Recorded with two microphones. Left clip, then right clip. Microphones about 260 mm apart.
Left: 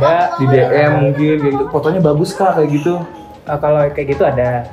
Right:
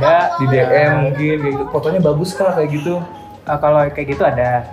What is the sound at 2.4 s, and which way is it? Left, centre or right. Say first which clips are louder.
Speech: left 2 dB; centre.